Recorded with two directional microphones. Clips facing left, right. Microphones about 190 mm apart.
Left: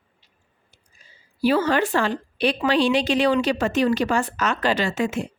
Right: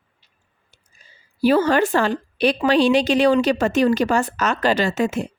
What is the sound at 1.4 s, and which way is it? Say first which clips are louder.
A woman's voice: right 3 dB; 45° right (ahead or behind).